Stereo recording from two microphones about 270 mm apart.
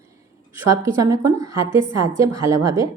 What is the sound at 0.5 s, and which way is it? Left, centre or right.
A woman's voice, centre.